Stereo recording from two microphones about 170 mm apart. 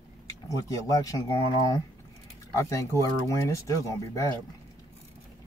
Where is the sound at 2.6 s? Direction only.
20° left (ahead or behind).